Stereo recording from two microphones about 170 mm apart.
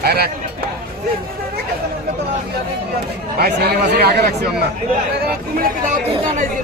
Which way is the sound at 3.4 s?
70° right (ahead or behind).